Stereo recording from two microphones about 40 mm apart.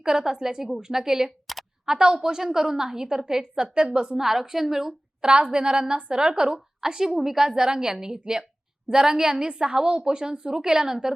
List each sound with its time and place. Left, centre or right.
0.0 s a woman's voice: centre
1.5 s a sound: centre
1.9 s a woman's voice: centre
4.2 s a woman's voice: centre
5.2 s a woman's voice: right